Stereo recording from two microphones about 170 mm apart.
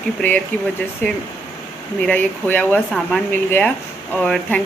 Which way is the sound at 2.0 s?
10° left (ahead or behind).